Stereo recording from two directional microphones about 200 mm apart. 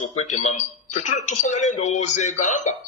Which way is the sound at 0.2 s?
35° left (ahead or behind).